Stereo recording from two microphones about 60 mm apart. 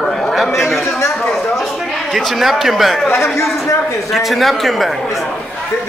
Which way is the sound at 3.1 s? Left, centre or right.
Left.